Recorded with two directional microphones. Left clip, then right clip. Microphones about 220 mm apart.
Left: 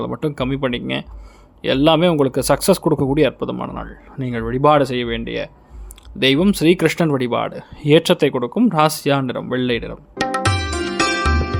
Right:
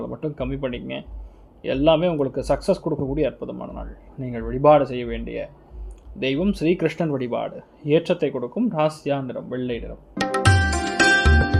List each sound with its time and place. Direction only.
0.0 s speech: 25° left (ahead or behind)
10.2 s music: centre (ahead or behind)